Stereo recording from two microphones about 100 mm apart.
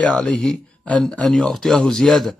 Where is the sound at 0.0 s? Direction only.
10° left (ahead or behind).